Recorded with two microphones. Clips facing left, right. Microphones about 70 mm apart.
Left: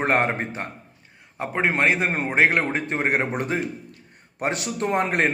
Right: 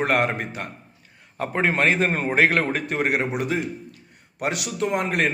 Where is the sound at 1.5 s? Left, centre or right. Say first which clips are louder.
Right 1 dB; centre.